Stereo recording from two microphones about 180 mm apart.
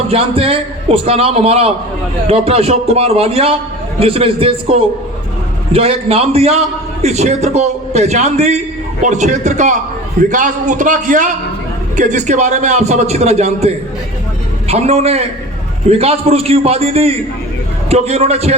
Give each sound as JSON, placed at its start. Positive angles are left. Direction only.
{"t": 0.1, "sound": "a man's voice", "side_deg": -30}